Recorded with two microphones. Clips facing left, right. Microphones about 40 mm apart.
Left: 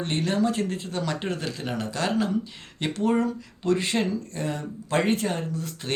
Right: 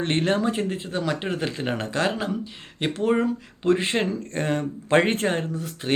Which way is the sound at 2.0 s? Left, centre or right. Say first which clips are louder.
Left 1 dB; centre.